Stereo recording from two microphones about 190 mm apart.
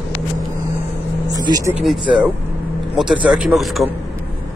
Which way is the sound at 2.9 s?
5° right (ahead or behind).